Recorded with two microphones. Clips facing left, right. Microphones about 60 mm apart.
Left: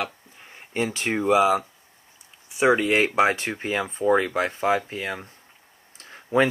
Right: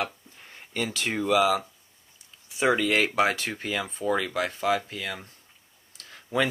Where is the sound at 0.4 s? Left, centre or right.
Centre.